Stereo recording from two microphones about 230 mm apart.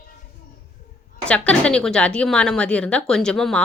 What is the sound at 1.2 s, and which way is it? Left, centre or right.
A woman's voice, centre.